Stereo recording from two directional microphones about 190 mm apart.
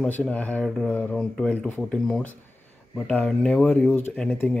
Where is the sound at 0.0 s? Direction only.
5° left (ahead or behind).